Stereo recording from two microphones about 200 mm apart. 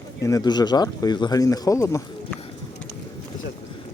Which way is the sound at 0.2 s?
15° left (ahead or behind).